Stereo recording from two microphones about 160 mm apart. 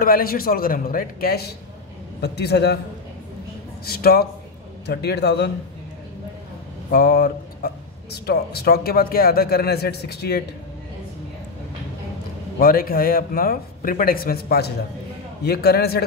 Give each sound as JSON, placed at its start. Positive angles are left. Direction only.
{"t": 0.0, "sound": "speech", "side_deg": 65}
{"t": 2.2, "sound": "a man's voice", "side_deg": 90}
{"t": 3.8, "sound": "speech", "side_deg": 70}
{"t": 4.8, "sound": "a man's voice", "side_deg": 90}
{"t": 6.9, "sound": "speech", "side_deg": 70}
{"t": 12.5, "sound": "speech", "side_deg": 65}